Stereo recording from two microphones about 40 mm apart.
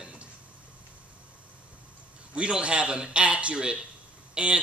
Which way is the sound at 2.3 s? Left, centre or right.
Right.